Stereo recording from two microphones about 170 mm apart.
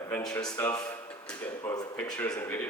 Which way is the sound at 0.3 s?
15° left (ahead or behind).